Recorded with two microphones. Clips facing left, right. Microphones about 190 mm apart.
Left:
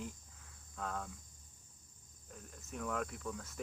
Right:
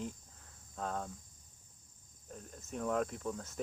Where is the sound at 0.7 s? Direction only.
30° right (ahead or behind).